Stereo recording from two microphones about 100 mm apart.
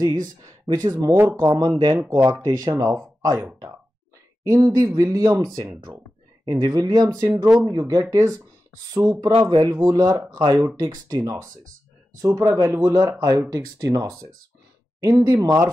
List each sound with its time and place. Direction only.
0.0 s speech: 40° right (ahead or behind)
2.4 s speech: 35° right (ahead or behind)
4.5 s speech: 35° right (ahead or behind)